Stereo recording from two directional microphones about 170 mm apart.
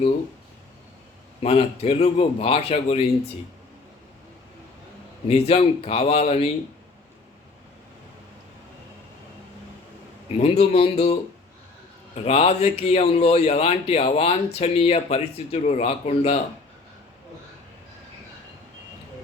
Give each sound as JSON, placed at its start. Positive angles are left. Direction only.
{"t": 1.4, "sound": "speech", "side_deg": 40}
{"t": 5.3, "sound": "speech", "side_deg": 35}
{"t": 10.3, "sound": "speech", "side_deg": 40}